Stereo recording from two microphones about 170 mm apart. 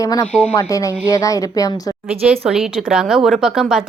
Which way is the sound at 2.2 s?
5° right (ahead or behind).